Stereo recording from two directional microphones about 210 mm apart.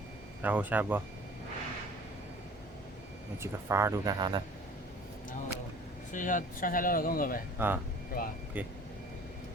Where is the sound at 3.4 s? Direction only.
15° right (ahead or behind).